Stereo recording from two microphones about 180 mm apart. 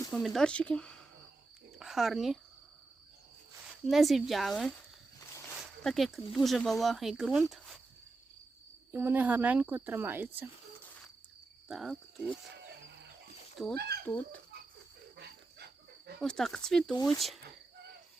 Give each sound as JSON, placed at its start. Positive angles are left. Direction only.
{"t": 0.1, "sound": "speech", "side_deg": 0}
{"t": 3.8, "sound": "speech", "side_deg": 0}
{"t": 5.8, "sound": "speech", "side_deg": 0}
{"t": 7.5, "sound": "cricket", "side_deg": 0}
{"t": 8.9, "sound": "speech", "side_deg": -10}
{"t": 11.7, "sound": "speech", "side_deg": 0}
{"t": 12.5, "sound": "wild animals", "side_deg": -65}
{"t": 13.7, "sound": "speech", "side_deg": -65}
{"t": 14.0, "sound": "speech", "side_deg": 10}
{"t": 15.1, "sound": "cricket", "side_deg": -65}
{"t": 16.2, "sound": "speech", "side_deg": 5}